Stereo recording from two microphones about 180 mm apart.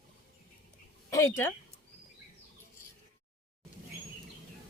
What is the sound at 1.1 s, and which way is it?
Speech, 15° left (ahead or behind).